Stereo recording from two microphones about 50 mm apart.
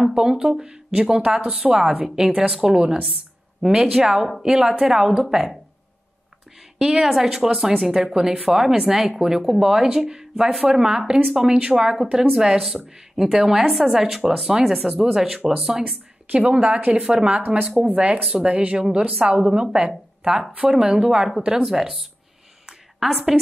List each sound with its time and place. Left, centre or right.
0.0 s speech: centre
6.8 s speech: centre
16.3 s speech: right
17.7 s speech: right
22.7 s a sound: centre